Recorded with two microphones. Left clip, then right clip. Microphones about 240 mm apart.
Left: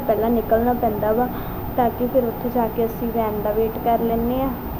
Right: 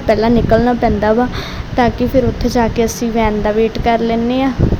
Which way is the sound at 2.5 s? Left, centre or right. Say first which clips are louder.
Right 6 dB; right.